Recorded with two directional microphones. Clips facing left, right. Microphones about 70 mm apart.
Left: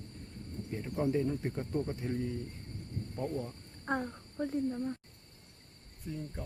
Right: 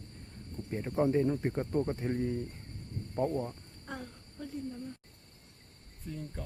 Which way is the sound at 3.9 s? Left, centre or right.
Left.